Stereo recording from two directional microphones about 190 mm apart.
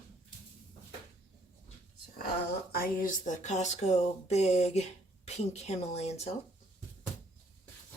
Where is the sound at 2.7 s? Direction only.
50° left (ahead or behind).